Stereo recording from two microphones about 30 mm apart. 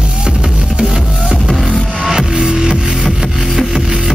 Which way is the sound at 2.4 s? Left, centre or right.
Right.